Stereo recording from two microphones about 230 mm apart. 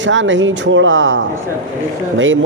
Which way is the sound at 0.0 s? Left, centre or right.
Right.